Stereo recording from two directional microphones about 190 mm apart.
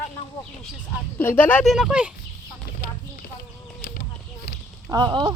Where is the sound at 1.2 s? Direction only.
10° left (ahead or behind).